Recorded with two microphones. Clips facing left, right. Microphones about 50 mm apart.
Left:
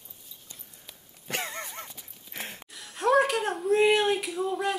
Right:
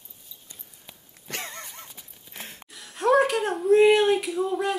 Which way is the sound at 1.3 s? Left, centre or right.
Centre.